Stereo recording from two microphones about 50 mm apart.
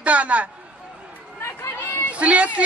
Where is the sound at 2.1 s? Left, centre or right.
Right.